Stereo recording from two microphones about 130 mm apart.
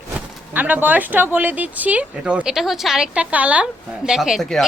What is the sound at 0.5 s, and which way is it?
Speech, 15° right (ahead or behind).